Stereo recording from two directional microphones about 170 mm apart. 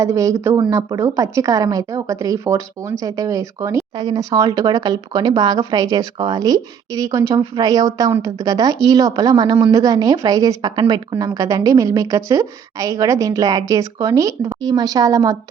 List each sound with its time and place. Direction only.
0.0 s speech: 20° right (ahead or behind)